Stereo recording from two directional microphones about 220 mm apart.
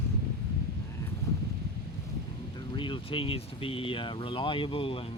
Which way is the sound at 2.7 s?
20° left (ahead or behind).